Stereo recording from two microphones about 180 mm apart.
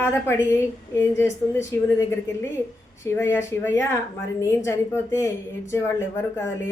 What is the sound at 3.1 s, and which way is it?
A woman's voice, 15° left (ahead or behind).